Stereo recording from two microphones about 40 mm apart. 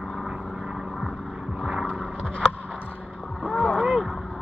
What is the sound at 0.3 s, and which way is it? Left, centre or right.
Vehicle, centre.